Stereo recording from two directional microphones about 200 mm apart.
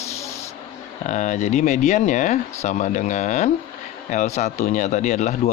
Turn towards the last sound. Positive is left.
turn(degrees=35)  # may be behind; listen again after turning